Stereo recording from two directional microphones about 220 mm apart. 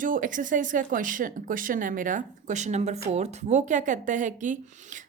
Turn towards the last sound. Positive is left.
turn(degrees=-35)  # may be behind; listen again after turning